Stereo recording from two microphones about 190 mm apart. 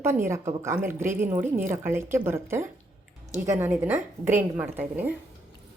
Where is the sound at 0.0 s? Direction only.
15° right (ahead or behind).